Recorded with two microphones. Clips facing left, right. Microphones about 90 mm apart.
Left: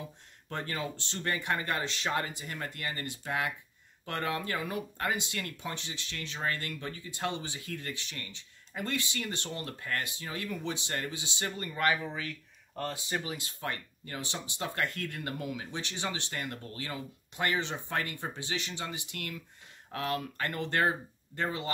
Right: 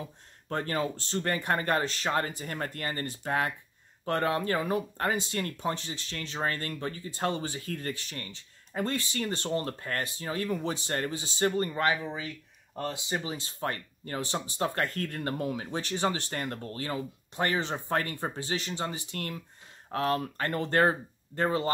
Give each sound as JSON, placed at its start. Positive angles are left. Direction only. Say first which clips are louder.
{"t": 0.5, "sound": "speech", "louder": "right 6 dB", "side_deg": -40}
{"t": 11.7, "sound": "speech", "louder": "right 1 dB", "side_deg": -25}